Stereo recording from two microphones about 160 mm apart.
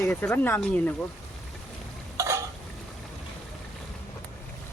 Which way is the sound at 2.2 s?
20° right (ahead or behind).